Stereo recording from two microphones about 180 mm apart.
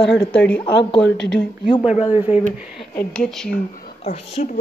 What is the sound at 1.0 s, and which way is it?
Speech, 70° left (ahead or behind).